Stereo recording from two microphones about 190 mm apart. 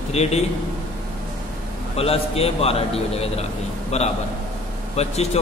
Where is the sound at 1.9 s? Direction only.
30° left (ahead or behind).